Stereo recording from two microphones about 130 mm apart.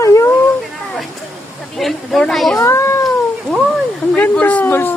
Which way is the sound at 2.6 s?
20° left (ahead or behind).